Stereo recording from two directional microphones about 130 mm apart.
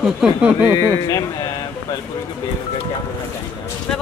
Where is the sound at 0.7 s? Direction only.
30° left (ahead or behind).